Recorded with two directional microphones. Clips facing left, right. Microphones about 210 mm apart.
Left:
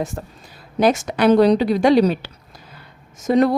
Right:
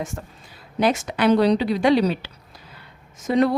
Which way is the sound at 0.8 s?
45° left (ahead or behind).